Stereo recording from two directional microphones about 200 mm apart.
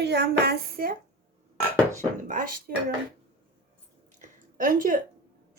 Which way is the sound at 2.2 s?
40° right (ahead or behind).